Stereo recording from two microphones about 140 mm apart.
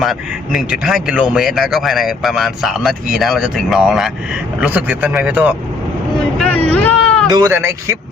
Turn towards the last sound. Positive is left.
turn(degrees=-20)  # may be behind; listen again after turning